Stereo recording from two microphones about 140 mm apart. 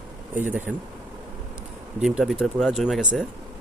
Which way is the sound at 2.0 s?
5° right (ahead or behind).